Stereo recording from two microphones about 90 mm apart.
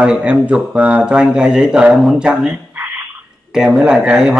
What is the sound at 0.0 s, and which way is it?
Speech, 15° right (ahead or behind).